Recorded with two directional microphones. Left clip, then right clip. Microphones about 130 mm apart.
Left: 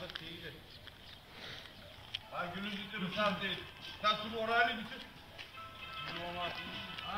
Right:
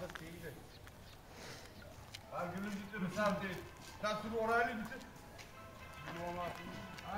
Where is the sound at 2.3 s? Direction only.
20° right (ahead or behind).